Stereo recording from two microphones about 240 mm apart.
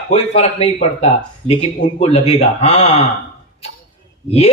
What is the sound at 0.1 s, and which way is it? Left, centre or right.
Speech, left.